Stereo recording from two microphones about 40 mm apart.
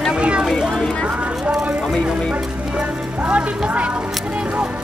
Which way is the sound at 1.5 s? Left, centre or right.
Centre.